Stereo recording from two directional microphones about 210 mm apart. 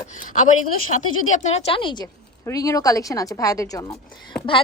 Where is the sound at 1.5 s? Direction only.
25° left (ahead or behind).